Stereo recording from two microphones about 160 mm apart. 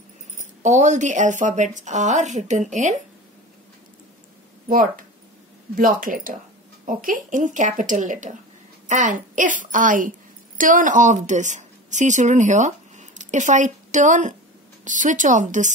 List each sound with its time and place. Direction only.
0.6 s speech: 50° right (ahead or behind)
4.6 s a woman's voice: 60° right (ahead or behind)